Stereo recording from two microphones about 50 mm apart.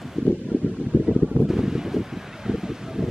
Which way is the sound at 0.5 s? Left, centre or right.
Right.